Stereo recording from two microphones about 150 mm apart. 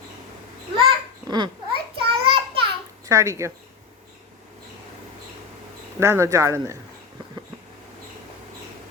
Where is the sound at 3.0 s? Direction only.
20° right (ahead or behind).